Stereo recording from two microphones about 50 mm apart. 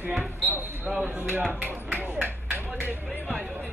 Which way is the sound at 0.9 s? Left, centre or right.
Centre.